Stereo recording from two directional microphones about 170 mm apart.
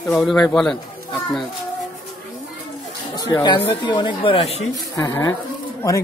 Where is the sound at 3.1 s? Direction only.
25° left (ahead or behind).